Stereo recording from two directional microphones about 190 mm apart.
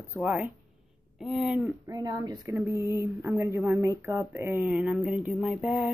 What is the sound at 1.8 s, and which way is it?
Speech, 20° right (ahead or behind).